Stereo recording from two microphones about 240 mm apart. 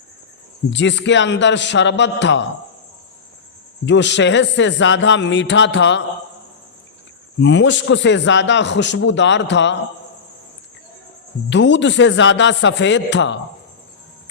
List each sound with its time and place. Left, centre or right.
0.7 s a man's voice: left
3.8 s a man's voice: left
7.3 s a man's voice: left
11.4 s a man's voice: left